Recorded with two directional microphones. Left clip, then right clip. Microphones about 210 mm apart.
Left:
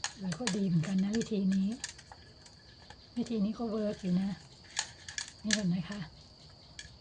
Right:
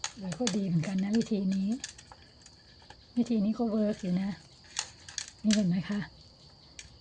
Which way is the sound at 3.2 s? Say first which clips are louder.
Right 5 dB; 25° right (ahead or behind).